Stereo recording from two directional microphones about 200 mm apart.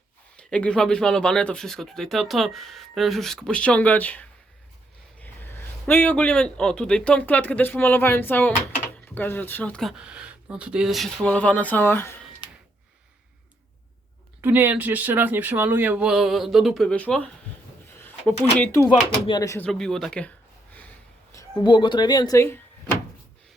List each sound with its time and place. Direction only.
0.3 s a man's voice: 5° left (ahead or behind)
14.4 s speech: 10° right (ahead or behind); by 17.2 s 5° left (ahead or behind)
17.9 s a sound: 10° left (ahead or behind)
18.6 s speech: 15° left (ahead or behind)
19.6 s speech: centre (ahead or behind)
20.7 s a sound: 10° left (ahead or behind)
21.6 s speech: 25° left (ahead or behind)